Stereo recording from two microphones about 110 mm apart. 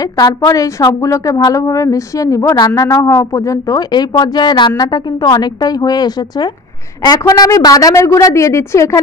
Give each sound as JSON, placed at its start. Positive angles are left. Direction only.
{"t": 0.0, "sound": "a woman's voice", "side_deg": 35}